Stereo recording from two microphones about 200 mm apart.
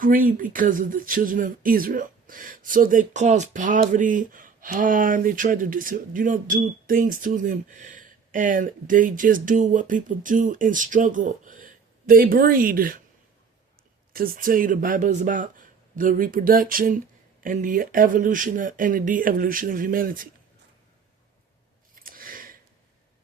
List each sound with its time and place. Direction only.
0.0 s speech: 45° right (ahead or behind)
14.1 s speech: 45° right (ahead or behind)
21.9 s a sound: 45° right (ahead or behind)